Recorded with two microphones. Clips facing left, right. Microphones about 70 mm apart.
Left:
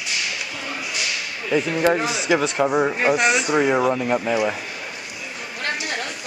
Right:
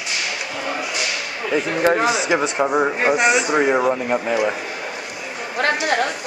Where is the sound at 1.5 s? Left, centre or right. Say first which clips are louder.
Right 1 dB; right.